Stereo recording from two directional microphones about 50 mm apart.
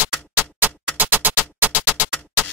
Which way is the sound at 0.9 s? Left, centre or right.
Right.